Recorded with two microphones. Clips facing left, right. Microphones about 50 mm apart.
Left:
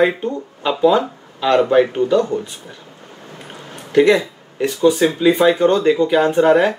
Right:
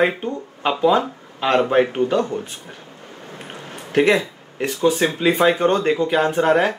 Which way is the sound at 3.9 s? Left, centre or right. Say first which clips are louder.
Left 4 dB; right.